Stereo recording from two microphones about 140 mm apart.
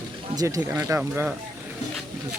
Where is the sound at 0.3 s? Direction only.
20° right (ahead or behind).